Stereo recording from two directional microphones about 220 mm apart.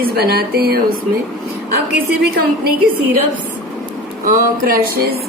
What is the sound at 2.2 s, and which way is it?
Speech, 45° right (ahead or behind).